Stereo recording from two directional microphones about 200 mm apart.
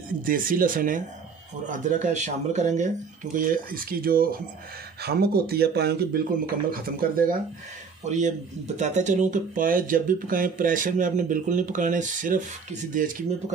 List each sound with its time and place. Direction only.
0.2 s speech: 45° right (ahead or behind)